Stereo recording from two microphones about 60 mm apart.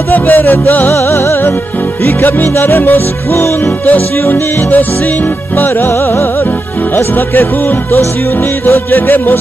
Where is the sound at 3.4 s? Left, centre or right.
Left.